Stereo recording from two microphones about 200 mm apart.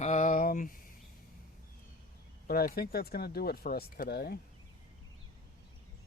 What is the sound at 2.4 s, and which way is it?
Speech, 50° left (ahead or behind).